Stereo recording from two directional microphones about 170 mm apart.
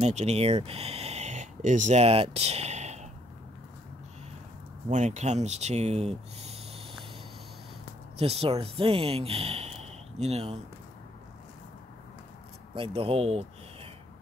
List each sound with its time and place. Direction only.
0.0 s speech: 40° right (ahead or behind)
4.8 s speech: 45° right (ahead or behind)
8.2 s speech: 35° right (ahead or behind)
12.7 s speech: 35° right (ahead or behind)